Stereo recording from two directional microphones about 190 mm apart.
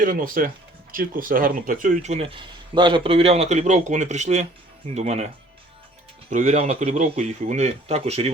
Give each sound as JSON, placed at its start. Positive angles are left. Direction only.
{"t": 0.0, "sound": "speech", "side_deg": -45}
{"t": 6.3, "sound": "speech", "side_deg": -40}